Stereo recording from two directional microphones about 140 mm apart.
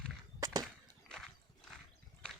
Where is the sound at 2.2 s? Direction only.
10° left (ahead or behind).